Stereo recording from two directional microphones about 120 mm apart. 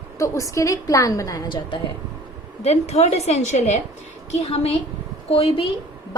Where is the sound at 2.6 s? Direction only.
65° left (ahead or behind).